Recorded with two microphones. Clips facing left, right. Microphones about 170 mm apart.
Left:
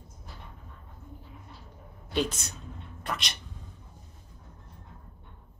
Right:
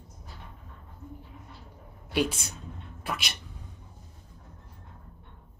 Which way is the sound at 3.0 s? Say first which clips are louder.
Even; 5° right (ahead or behind).